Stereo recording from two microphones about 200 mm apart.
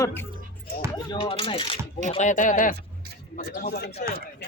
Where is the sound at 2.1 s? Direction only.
35° left (ahead or behind).